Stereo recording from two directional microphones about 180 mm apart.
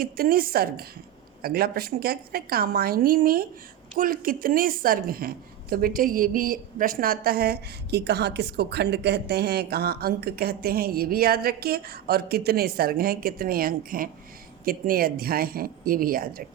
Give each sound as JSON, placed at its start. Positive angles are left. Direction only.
{"t": 0.0, "sound": "a woman's voice", "side_deg": -55}